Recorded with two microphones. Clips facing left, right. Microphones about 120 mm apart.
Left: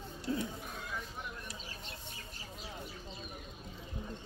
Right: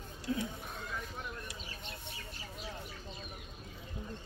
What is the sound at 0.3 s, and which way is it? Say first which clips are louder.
Speech: even; 35° left (ahead or behind).